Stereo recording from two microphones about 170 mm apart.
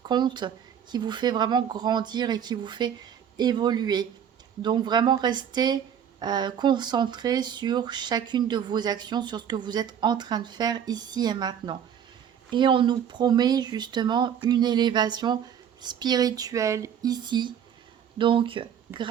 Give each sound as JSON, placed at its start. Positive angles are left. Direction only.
{"t": 0.0, "sound": "speech", "side_deg": -25}